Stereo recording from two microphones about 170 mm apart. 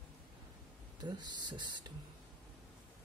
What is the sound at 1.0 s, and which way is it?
Speech, 25° right (ahead or behind).